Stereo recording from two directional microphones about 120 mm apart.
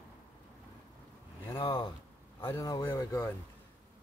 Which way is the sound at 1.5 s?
40° left (ahead or behind).